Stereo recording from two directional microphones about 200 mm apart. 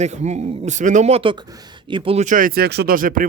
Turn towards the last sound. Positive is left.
turn(degrees=-45)  # may be behind; listen again after turning